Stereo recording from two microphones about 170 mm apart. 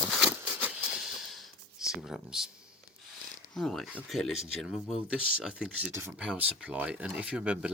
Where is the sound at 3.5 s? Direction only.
Centre (ahead or behind).